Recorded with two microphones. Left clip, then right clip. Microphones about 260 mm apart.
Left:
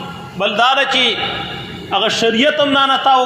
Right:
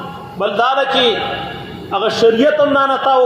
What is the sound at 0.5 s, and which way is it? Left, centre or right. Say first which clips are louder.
A man's voice: left 1 dB; left.